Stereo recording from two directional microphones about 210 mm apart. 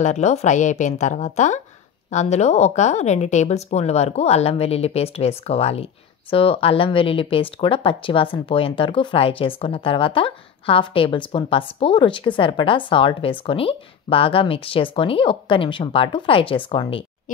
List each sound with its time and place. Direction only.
0.0 s speech: 35° left (ahead or behind)